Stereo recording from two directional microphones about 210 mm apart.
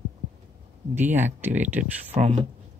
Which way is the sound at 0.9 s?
10° right (ahead or behind).